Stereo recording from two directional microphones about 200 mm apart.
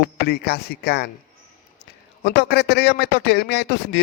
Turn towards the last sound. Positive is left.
turn(degrees=55)  # may be behind; listen again after turning